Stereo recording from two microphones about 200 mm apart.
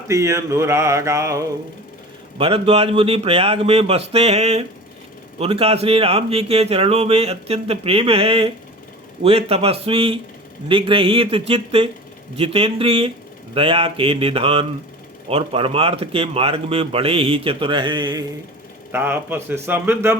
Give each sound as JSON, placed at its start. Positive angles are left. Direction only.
{"t": 0.1, "sound": "mantra", "side_deg": -15}
{"t": 2.4, "sound": "speech", "side_deg": -30}
{"t": 18.9, "sound": "mantra", "side_deg": -10}